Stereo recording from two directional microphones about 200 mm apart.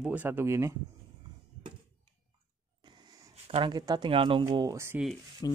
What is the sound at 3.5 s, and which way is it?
Speech, 20° right (ahead or behind).